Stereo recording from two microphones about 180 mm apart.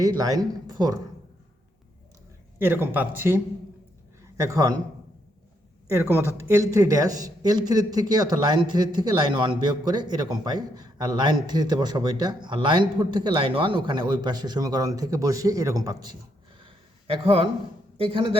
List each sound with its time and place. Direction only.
0.0 s speech: 20° right (ahead or behind)
2.6 s speech: 15° right (ahead or behind)
5.9 s speech: 15° right (ahead or behind)
16.6 s a sound: 30° right (ahead or behind)
17.9 s speech: 30° right (ahead or behind)